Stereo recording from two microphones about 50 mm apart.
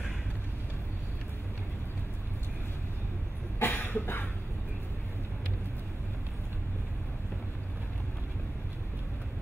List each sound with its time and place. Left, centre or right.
3.5 s cough: left